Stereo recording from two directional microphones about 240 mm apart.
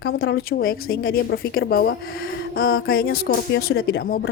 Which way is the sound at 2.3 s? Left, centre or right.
Left.